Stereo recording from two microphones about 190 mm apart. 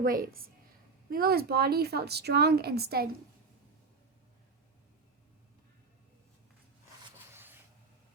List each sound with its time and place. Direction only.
0.0 s a woman's voice: 50° right (ahead or behind)